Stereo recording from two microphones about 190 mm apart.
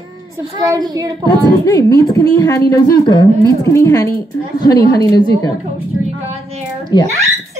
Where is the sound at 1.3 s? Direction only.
20° left (ahead or behind).